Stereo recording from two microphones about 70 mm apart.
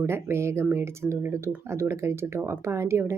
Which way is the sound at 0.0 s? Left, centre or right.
Right.